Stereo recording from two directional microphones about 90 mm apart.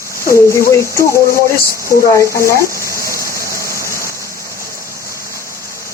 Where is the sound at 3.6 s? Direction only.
35° left (ahead or behind).